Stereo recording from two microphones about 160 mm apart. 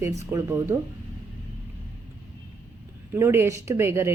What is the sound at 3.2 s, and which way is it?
Speech, 15° right (ahead or behind).